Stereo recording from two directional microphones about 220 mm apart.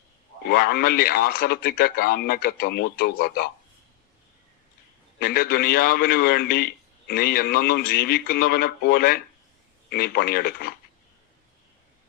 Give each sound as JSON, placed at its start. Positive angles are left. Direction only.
{"t": 0.4, "sound": "speech", "side_deg": 45}
{"t": 5.2, "sound": "speech", "side_deg": 45}